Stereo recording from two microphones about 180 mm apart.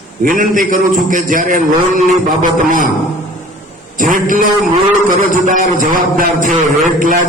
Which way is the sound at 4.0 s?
50° right (ahead or behind).